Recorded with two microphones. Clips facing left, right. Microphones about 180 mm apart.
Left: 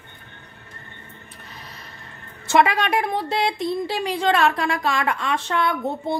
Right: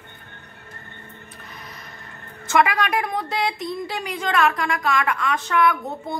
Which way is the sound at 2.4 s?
30° left (ahead or behind).